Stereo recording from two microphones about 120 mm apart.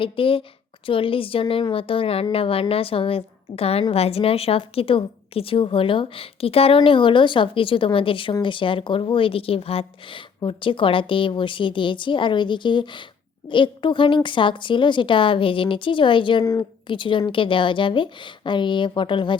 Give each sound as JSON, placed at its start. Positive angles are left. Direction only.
{"t": 0.0, "sound": "speech", "side_deg": 50}